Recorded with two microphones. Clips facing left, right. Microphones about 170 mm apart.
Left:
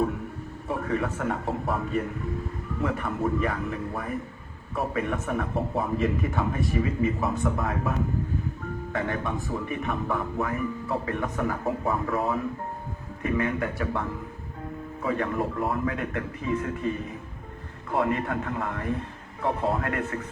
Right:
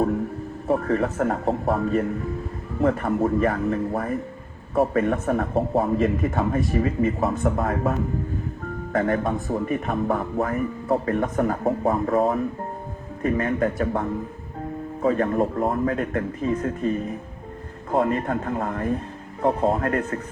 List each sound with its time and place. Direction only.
0.7 s a man's voice: 45° right (ahead or behind)
15.4 s a man's voice: 25° right (ahead or behind)
15.7 s speech: 40° right (ahead or behind)
18.0 s speech: 40° right (ahead or behind)